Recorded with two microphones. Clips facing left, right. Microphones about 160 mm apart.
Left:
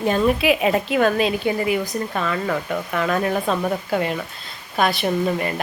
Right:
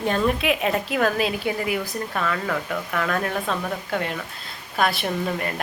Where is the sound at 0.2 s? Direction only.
5° left (ahead or behind).